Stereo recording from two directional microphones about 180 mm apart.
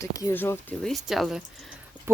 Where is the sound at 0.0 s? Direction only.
20° left (ahead or behind).